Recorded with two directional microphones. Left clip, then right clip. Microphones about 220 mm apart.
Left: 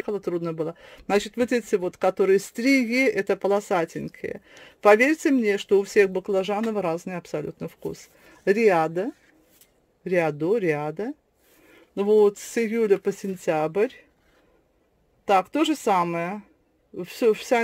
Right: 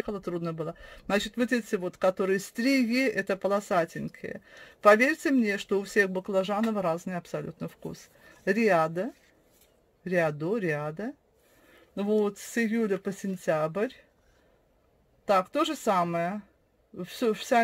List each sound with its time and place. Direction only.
0.0 s speech: 35° left (ahead or behind)
15.2 s speech: 40° left (ahead or behind)